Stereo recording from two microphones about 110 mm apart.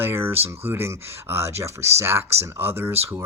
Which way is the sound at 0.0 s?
20° right (ahead or behind).